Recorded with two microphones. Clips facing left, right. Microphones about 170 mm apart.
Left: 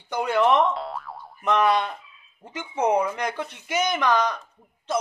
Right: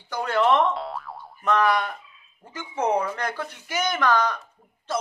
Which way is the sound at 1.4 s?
20° left (ahead or behind).